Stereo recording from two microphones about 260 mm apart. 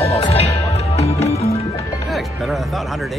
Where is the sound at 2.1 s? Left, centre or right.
Centre.